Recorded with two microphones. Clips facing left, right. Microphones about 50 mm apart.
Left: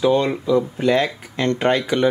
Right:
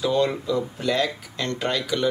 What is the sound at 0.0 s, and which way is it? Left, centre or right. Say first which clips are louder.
Speech: left 4 dB; left.